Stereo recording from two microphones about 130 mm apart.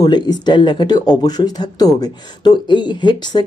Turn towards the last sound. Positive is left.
turn(degrees=35)  # may be behind; listen again after turning